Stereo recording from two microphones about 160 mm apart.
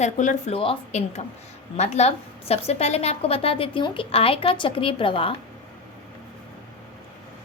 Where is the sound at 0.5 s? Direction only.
35° left (ahead or behind).